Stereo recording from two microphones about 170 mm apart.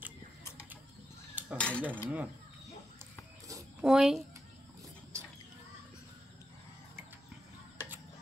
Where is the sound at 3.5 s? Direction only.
20° right (ahead or behind).